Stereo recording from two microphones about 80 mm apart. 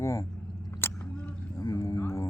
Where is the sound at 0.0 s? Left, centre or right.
Left.